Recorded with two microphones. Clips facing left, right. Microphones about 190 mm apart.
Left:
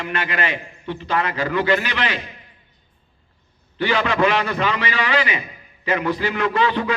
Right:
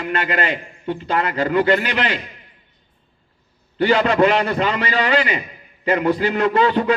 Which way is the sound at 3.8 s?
35° right (ahead or behind).